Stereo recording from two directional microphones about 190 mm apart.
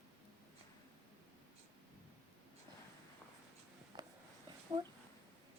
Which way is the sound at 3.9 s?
25° right (ahead or behind).